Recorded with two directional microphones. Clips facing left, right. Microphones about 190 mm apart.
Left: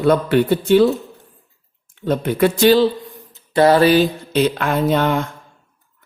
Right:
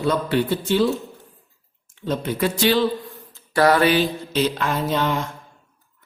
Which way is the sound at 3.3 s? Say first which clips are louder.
Left 4 dB; 25° left (ahead or behind).